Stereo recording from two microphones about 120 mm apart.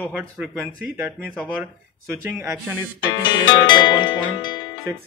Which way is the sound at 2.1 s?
25° right (ahead or behind).